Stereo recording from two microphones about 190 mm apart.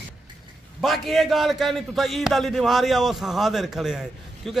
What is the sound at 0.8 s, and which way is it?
A man's voice, centre (ahead or behind).